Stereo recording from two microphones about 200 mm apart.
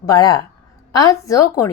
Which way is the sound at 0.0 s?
20° left (ahead or behind).